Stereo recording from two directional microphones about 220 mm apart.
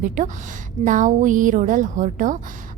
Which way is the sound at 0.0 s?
35° right (ahead or behind).